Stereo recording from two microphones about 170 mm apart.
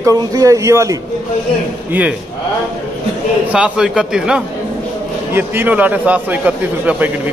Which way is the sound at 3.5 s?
5° right (ahead or behind).